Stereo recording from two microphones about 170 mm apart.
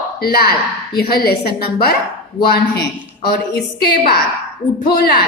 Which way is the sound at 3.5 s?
70° left (ahead or behind).